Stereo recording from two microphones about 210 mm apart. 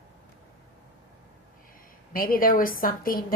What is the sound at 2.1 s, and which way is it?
A woman's voice, 45° left (ahead or behind).